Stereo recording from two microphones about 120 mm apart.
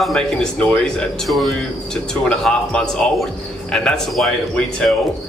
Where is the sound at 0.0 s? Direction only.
5° left (ahead or behind).